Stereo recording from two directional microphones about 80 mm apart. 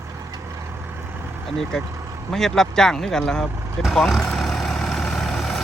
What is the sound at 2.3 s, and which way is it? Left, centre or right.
Vehicle, centre.